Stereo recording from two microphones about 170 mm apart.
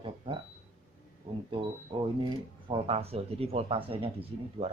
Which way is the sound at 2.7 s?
35° right (ahead or behind).